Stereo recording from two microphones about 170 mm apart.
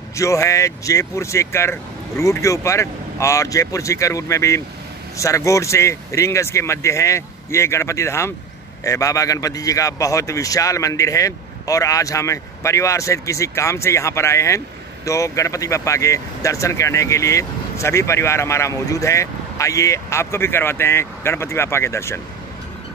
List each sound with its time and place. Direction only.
0.1 s a man's voice: 20° left (ahead or behind)